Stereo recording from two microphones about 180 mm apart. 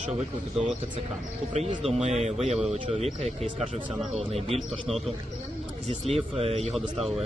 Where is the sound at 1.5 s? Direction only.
35° right (ahead or behind).